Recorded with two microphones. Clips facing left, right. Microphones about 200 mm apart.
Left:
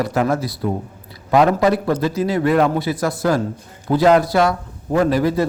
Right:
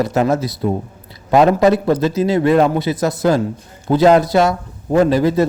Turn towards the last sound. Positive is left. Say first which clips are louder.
# right 3 dB
turn(degrees=-25)  # may be behind; listen again after turning